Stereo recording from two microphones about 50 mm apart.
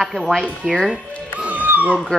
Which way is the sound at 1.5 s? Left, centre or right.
Right.